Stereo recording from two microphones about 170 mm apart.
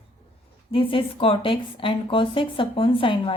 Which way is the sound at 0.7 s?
30° left (ahead or behind).